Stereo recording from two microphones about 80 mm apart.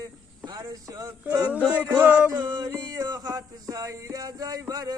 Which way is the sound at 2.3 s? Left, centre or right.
Right.